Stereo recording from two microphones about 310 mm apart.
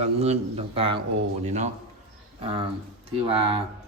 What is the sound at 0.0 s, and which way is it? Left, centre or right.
A man's voice, right.